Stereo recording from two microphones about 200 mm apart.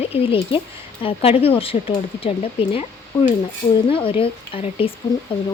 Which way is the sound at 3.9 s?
25° left (ahead or behind).